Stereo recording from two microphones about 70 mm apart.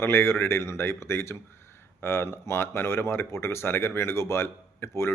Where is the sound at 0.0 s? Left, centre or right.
Left.